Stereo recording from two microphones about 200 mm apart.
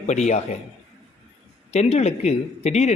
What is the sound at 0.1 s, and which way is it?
Speech, 35° left (ahead or behind).